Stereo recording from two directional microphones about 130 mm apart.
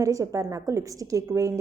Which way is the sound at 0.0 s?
25° right (ahead or behind).